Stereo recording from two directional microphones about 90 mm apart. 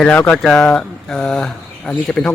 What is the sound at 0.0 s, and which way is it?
Speech, 15° left (ahead or behind).